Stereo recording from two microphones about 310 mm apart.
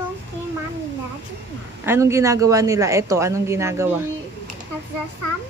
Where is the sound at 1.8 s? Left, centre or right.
Centre.